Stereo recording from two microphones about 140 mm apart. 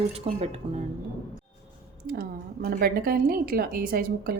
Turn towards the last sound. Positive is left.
turn(degrees=-90)